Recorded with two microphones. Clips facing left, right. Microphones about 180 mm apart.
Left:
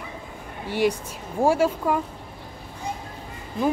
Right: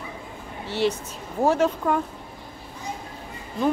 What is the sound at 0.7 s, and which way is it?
Speech, 10° left (ahead or behind).